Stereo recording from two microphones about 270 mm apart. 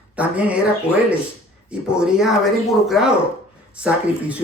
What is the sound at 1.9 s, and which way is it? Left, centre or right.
Speech, centre.